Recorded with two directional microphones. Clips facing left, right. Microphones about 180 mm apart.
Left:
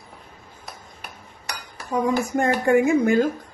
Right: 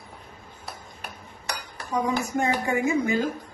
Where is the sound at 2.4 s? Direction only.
55° left (ahead or behind).